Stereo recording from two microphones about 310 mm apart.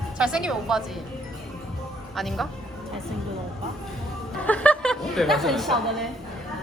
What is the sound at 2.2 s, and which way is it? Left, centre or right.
Speech, centre.